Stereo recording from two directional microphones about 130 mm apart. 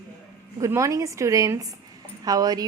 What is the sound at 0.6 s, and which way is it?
A woman's voice, 25° right (ahead or behind).